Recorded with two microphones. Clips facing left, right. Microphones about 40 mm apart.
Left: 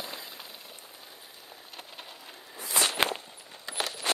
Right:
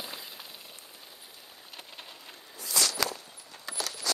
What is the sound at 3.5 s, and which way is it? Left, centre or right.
Keys jangling, left.